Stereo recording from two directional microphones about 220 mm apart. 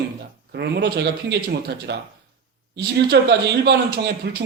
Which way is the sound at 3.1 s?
50° right (ahead or behind).